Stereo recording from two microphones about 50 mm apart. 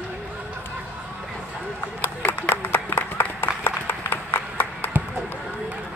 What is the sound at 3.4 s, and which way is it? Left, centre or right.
Clapping, left.